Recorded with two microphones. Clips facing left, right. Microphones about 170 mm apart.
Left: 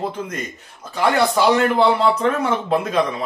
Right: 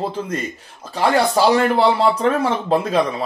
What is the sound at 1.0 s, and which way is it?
Speech, 30° right (ahead or behind).